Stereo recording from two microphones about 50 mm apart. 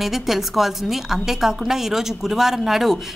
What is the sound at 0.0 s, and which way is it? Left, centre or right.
A woman's voice, centre.